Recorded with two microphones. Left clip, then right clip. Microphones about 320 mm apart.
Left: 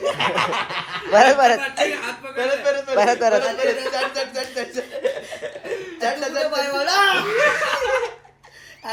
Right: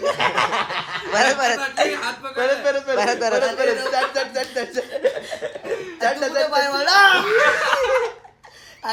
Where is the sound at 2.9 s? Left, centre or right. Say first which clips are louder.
Left 7 dB; centre.